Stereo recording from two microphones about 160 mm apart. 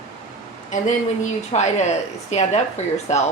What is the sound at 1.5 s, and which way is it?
Speech, 45° left (ahead or behind).